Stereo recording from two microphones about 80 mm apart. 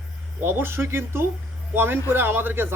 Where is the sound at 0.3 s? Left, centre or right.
Right.